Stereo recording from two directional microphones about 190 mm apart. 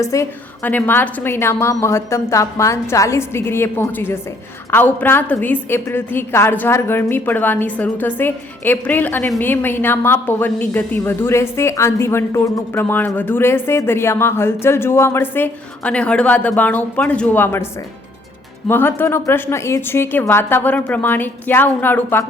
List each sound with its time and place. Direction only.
0.0 s a woman's voice: 15° left (ahead or behind)
18.7 s a woman's voice: 10° left (ahead or behind)